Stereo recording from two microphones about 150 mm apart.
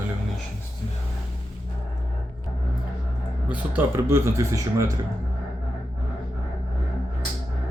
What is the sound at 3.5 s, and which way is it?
A man's voice, 15° right (ahead or behind).